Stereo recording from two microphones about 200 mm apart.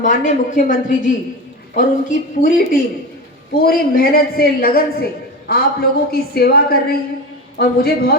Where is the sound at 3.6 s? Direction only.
45° left (ahead or behind).